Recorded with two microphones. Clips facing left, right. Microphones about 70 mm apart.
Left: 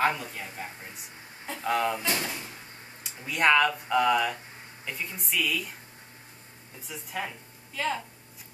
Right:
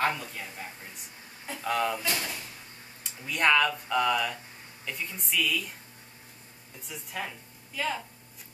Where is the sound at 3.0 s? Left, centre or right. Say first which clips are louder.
Left 2 dB; centre.